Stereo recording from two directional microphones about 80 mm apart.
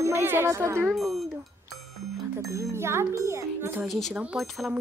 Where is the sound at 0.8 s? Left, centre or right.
Centre.